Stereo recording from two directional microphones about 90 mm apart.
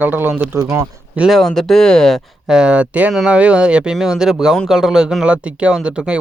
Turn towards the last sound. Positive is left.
turn(degrees=-10)  # may be behind; listen again after turning